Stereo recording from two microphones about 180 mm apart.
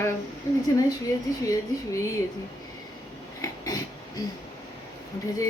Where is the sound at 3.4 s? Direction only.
20° left (ahead or behind).